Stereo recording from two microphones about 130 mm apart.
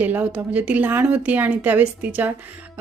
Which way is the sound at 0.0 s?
10° right (ahead or behind).